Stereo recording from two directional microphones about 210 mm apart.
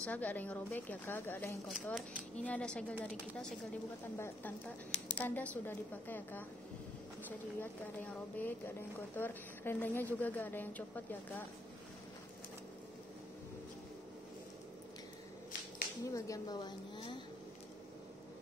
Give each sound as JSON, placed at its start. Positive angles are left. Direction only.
{"t": 0.0, "sound": "a woman's voice", "side_deg": 5}
{"t": 1.7, "sound": "a woman's voice", "side_deg": -5}
{"t": 16.1, "sound": "speech", "side_deg": 15}